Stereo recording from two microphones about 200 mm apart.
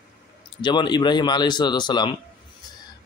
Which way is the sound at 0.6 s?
20° left (ahead or behind).